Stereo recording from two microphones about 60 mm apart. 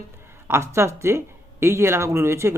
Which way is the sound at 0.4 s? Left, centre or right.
Right.